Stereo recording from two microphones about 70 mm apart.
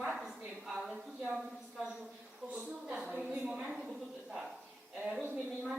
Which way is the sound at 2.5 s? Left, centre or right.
Right.